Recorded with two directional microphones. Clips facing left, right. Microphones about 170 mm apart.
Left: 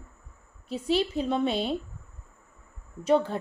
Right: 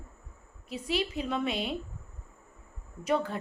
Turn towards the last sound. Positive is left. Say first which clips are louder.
# left 6 dB
turn(degrees=30)  # may be behind; listen again after turning